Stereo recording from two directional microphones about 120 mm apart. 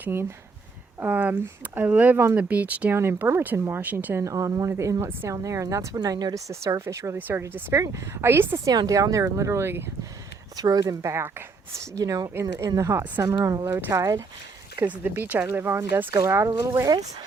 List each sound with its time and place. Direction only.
0.0 s speech: 20° right (ahead or behind)
8.7 s speech: 30° right (ahead or behind)